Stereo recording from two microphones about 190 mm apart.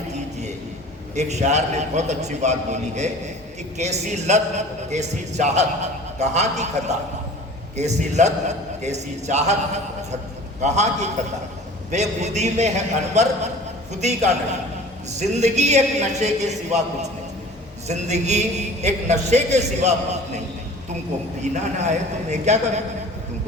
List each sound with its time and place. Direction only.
1.1 s a man's voice: 35° right (ahead or behind)
21.5 s a man's voice: 35° right (ahead or behind)